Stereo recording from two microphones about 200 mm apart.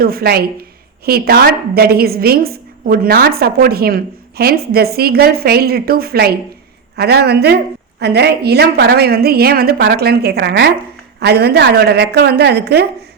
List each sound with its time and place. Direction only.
0.0 s a woman's voice: 50° right (ahead or behind)